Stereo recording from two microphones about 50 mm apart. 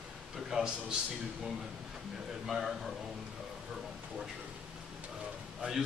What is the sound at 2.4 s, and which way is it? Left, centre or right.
Speech, centre.